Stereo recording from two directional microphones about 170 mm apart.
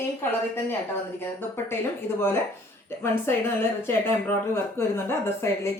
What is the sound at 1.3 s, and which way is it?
Speech, 15° left (ahead or behind).